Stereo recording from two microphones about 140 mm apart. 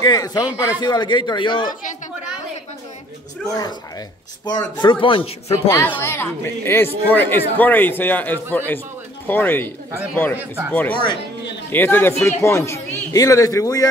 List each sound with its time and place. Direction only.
0.0 s speech: 30° left (ahead or behind)
0.5 s speech: 10° right (ahead or behind)
0.7 s speech: 30° left (ahead or behind)
4.5 s speech: 30° left (ahead or behind)
5.5 s a man's voice: 20° left (ahead or behind)
10.3 s speech: 15° right (ahead or behind)
10.7 s a man's voice: 15° left (ahead or behind)